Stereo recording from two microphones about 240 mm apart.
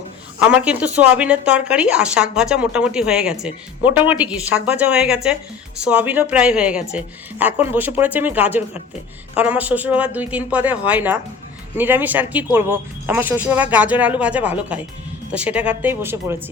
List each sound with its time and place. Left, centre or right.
0.3 s speech: centre